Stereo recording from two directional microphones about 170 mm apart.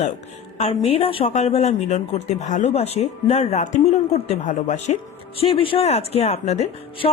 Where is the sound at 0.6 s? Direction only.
40° left (ahead or behind).